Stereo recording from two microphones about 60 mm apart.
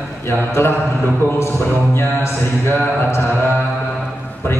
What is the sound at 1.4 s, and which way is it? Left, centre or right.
Speech, left.